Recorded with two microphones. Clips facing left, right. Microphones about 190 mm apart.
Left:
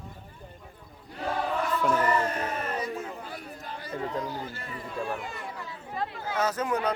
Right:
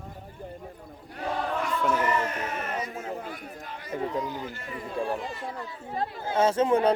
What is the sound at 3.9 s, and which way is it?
Speech, 15° right (ahead or behind).